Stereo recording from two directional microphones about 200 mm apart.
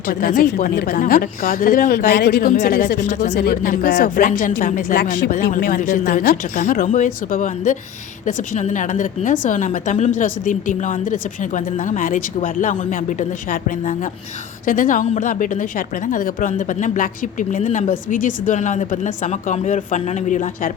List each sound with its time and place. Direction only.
0.1 s speech: 45° left (ahead or behind)
2.5 s a woman's voice: 45° left (ahead or behind)